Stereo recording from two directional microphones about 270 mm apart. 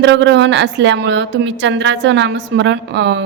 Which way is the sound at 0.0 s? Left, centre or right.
Right.